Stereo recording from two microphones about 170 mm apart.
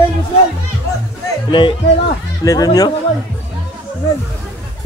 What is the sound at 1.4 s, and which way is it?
A man's voice, 30° left (ahead or behind).